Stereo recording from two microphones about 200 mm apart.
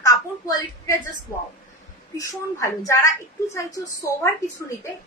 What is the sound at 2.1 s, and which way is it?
Speech, 15° left (ahead or behind).